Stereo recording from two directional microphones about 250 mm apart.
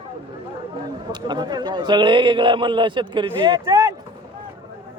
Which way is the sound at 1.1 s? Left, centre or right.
Centre.